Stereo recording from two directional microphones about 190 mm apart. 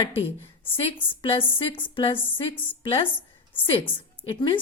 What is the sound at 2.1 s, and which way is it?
Speech, 10° left (ahead or behind).